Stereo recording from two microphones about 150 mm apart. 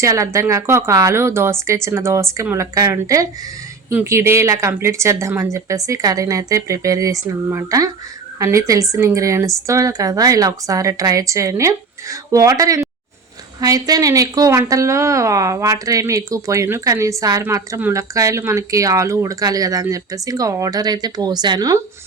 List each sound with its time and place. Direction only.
0.0 s a woman's voice: 20° right (ahead or behind)